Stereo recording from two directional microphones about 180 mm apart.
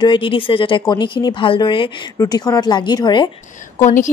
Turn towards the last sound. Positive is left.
turn(degrees=40)  # may be behind; listen again after turning